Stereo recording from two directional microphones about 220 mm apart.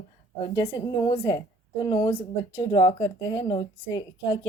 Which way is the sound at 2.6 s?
20° left (ahead or behind).